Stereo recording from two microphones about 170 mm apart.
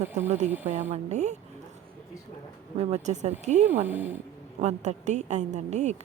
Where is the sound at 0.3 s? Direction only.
40° right (ahead or behind).